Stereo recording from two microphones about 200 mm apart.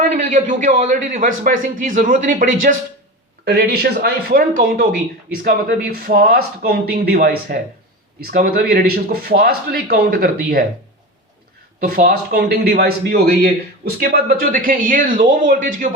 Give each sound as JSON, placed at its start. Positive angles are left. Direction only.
{"t": 0.1, "sound": "a man's voice", "side_deg": -35}
{"t": 3.4, "sound": "speech", "side_deg": -55}
{"t": 11.8, "sound": "speech", "side_deg": -45}